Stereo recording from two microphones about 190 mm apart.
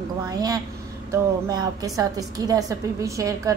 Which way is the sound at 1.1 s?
20° right (ahead or behind).